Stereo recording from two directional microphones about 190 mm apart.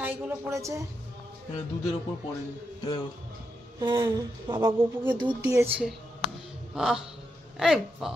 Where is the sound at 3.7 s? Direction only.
25° right (ahead or behind).